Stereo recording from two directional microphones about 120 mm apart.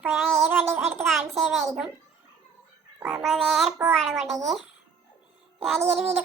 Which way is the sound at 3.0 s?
5° right (ahead or behind).